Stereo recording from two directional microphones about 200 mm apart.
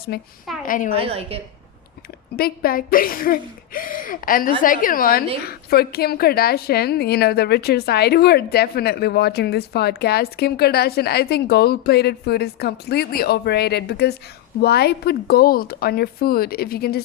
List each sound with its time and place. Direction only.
0.1 s a woman's voice: 50° left (ahead or behind)
0.9 s a woman's voice: 30° right (ahead or behind)
2.3 s a woman's voice: 50° left (ahead or behind)